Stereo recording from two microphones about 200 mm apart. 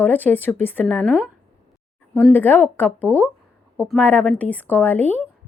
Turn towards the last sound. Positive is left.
turn(degrees=10)  # may be behind; listen again after turning